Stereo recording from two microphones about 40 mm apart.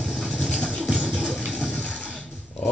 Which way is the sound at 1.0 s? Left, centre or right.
Left.